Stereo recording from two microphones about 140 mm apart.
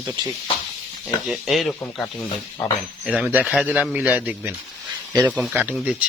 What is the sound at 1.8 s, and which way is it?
Speech, 20° left (ahead or behind).